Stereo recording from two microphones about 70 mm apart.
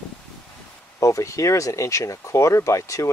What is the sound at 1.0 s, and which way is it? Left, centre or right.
Speech, left.